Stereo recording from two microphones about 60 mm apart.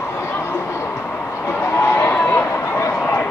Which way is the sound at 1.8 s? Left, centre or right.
Left.